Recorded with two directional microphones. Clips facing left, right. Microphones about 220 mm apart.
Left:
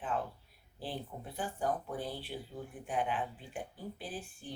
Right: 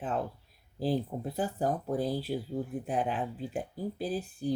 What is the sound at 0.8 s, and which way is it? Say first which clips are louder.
Speech: right 11 dB; 40° right (ahead or behind).